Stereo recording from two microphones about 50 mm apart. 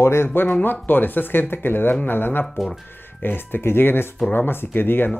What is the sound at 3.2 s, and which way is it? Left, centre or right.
Speech, left.